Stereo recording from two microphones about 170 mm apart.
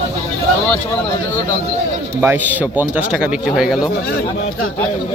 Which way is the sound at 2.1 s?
10° right (ahead or behind).